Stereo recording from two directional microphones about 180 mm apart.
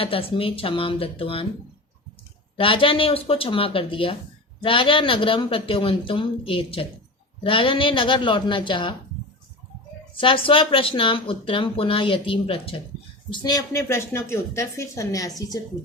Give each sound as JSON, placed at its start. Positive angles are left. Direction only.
{"t": 0.0, "sound": "speech", "side_deg": 30}
{"t": 2.6, "sound": "speech", "side_deg": 30}
{"t": 10.2, "sound": "a woman's voice", "side_deg": 30}